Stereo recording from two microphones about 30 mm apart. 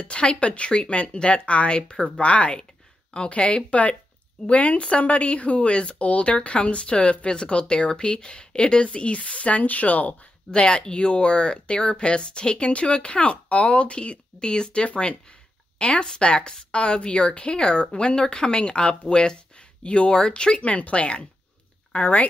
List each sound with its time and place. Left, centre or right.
0.0 s speech: left
4.5 s speech: left
4.7 s speech: left
7.2 s speech: left
10.5 s speech: left
20.7 s speech: left
21.9 s speech: left